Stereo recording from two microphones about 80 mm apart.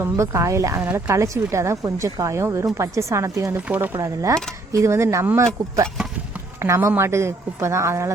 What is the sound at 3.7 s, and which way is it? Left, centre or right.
Speech, right.